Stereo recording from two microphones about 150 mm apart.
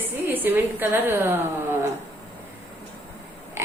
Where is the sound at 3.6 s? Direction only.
20° right (ahead or behind).